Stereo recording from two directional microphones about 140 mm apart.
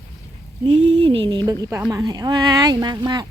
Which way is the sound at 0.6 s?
45° right (ahead or behind).